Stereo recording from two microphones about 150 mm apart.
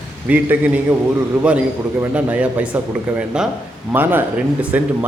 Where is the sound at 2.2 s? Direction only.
10° right (ahead or behind).